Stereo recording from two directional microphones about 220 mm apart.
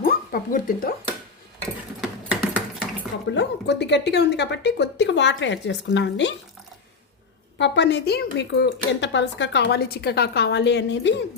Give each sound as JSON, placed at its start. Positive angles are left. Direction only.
{"t": 0.0, "sound": "speech", "side_deg": 40}
{"t": 2.0, "sound": "typing", "side_deg": -5}
{"t": 3.2, "sound": "speech", "side_deg": 50}
{"t": 7.6, "sound": "speech", "side_deg": 50}